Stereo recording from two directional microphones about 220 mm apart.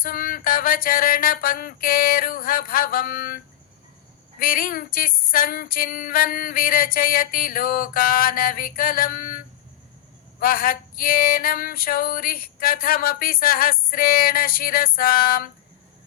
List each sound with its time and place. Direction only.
0.0 s female singing: 40° left (ahead or behind)
10.4 s female singing: 40° left (ahead or behind)